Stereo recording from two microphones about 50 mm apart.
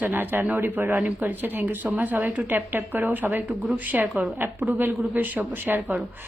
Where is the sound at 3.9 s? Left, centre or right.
Right.